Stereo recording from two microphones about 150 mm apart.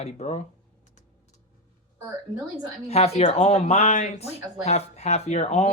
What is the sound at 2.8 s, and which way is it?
Speech, 45° left (ahead or behind).